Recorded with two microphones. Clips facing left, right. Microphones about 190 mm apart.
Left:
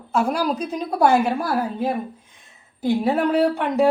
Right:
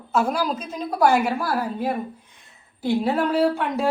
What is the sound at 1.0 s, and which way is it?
Speech, 25° left (ahead or behind).